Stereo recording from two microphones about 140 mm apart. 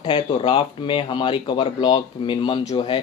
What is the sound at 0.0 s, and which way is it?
Speech, 35° left (ahead or behind).